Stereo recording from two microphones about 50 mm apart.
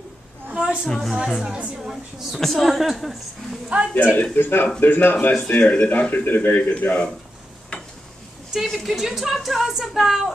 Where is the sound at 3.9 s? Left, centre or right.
Left.